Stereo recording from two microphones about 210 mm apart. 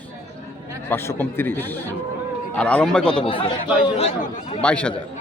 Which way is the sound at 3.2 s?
25° left (ahead or behind).